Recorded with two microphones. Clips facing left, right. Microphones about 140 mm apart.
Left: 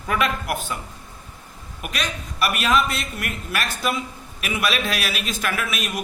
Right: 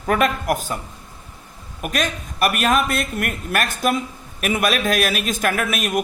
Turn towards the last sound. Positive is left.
turn(degrees=-50)  # may be behind; listen again after turning